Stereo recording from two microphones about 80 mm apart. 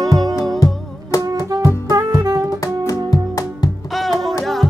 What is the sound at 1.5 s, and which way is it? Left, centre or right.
Music, right.